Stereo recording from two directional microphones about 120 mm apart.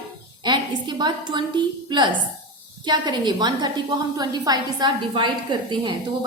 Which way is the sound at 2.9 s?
35° right (ahead or behind).